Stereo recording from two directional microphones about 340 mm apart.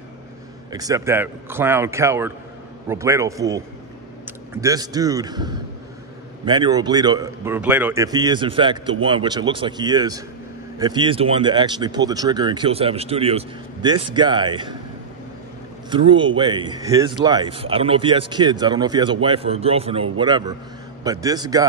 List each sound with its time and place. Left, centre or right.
0.7 s speech: centre
15.9 s speech: centre